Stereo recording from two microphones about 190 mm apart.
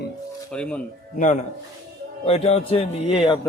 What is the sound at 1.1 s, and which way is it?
Speech, 40° left (ahead or behind).